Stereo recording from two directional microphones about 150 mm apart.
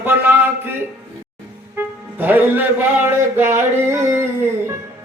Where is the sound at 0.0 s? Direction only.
15° right (ahead or behind).